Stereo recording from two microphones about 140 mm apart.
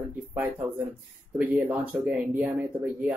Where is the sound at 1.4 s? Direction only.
10° right (ahead or behind).